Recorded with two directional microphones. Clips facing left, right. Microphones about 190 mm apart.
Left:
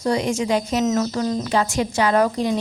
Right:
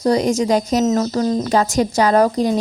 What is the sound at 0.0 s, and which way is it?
Speech, 40° right (ahead or behind).